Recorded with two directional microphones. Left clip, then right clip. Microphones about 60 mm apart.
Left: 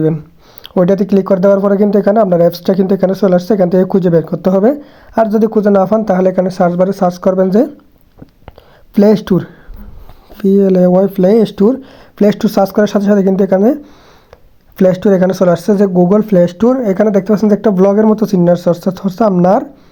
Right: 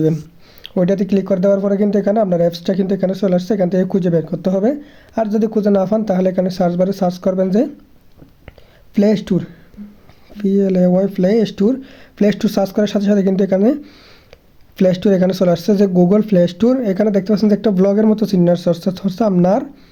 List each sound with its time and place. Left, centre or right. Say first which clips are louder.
0.6 s speech: left 5 dB; left
1.7 s speech: left 6 dB; left
5.1 s speech: left 6 dB; left; by 7.2 s centre
7.2 s speech: left 6 dB; left
9.0 s speech: left 6 dB; left
10.6 s speech: left 5 dB; left
11.9 s speech: left 5 dB; centre
14.8 s speech: left 4 dB; centre